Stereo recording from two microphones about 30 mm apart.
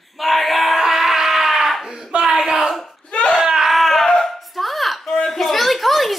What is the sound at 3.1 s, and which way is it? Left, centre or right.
Wail, left.